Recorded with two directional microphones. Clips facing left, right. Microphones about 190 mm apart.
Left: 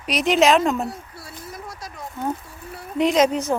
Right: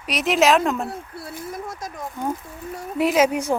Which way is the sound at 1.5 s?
50° right (ahead or behind).